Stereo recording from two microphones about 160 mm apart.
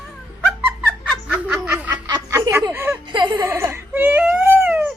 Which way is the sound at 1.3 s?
5° right (ahead or behind).